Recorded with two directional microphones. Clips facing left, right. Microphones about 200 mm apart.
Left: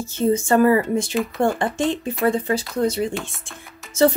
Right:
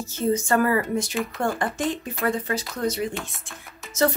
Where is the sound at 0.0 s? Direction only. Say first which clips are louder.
Left 4 dB; 25° left (ahead or behind).